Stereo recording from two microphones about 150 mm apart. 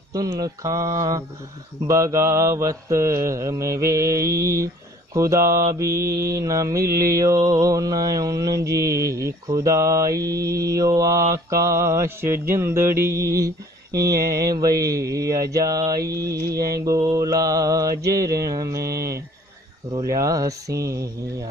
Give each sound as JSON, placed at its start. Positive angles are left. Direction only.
{"t": 0.1, "sound": "mantra", "side_deg": -25}